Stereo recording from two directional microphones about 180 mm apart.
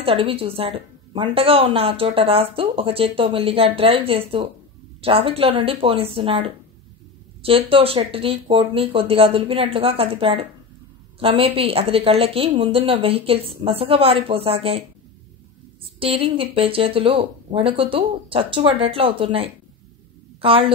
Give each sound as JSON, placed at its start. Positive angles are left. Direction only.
{"t": 0.0, "sound": "a woman's voice", "side_deg": -30}
{"t": 15.8, "sound": "a woman's voice", "side_deg": -30}